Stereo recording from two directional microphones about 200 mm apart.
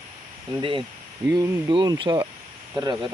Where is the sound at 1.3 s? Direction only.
20° right (ahead or behind).